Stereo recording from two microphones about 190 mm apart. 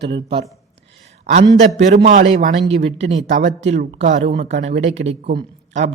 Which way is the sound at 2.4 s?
35° right (ahead or behind).